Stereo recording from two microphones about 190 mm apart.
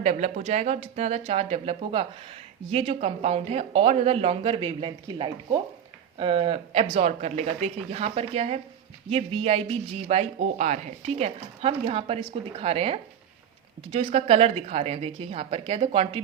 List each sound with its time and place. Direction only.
0.0 s speech: 35° right (ahead or behind)